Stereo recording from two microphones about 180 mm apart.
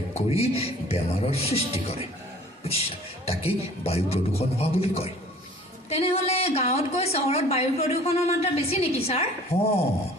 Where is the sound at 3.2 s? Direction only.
35° left (ahead or behind).